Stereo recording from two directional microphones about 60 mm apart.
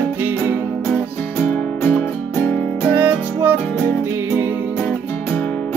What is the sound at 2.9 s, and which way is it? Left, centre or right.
Music, right.